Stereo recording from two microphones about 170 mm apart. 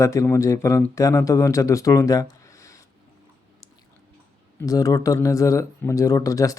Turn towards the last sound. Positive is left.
turn(degrees=20)  # may be behind; listen again after turning